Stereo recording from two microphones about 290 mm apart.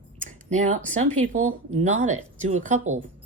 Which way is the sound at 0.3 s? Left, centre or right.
Right.